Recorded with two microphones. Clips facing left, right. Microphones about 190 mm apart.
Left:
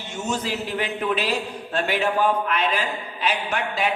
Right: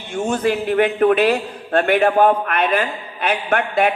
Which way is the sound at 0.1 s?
55° right (ahead or behind).